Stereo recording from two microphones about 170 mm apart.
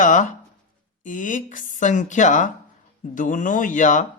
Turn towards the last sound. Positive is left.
turn(degrees=50)  # may be behind; listen again after turning